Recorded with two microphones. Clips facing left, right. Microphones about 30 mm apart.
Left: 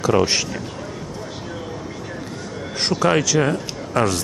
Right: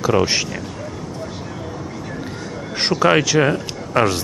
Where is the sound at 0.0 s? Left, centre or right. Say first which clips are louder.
Right 1 dB; centre.